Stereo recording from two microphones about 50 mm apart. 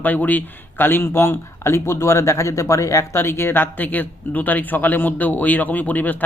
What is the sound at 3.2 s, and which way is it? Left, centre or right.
Speech, left.